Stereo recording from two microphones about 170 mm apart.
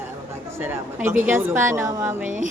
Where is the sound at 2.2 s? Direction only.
50° right (ahead or behind).